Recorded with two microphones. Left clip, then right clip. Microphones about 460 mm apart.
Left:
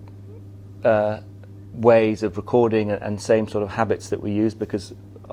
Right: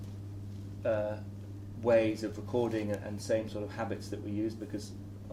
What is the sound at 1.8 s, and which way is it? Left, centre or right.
Speech, left.